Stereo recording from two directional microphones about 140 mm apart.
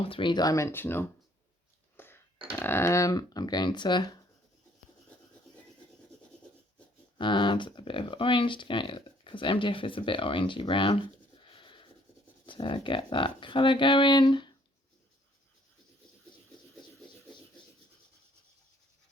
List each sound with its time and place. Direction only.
0.0 s speech: 40° left (ahead or behind); by 1.0 s 15° left (ahead or behind)
2.0 s a sound: 15° left (ahead or behind)
2.5 s speech: 20° left (ahead or behind)
7.2 s speech: 35° left (ahead or behind)